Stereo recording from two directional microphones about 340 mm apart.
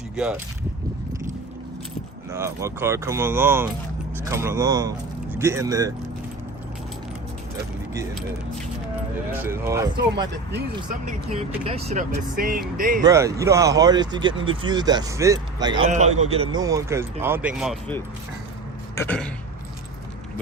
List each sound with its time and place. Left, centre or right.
2.3 s speech: centre
9.3 s speech: centre
10.8 s speech: centre
13.1 s speech: centre
18.9 s throat clearing: centre